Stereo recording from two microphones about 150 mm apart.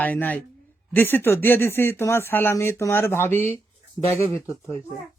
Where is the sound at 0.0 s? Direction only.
10° left (ahead or behind).